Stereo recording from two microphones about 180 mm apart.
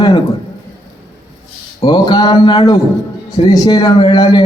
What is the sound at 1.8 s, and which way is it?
A man's voice, 25° left (ahead or behind).